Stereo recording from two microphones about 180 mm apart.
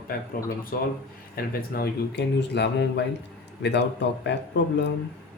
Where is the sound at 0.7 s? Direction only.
55° left (ahead or behind); by 4.9 s 75° left (ahead or behind).